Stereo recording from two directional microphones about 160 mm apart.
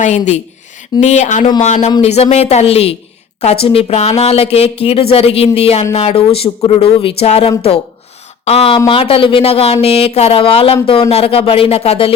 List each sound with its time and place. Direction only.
0.0 s speech: 45° left (ahead or behind)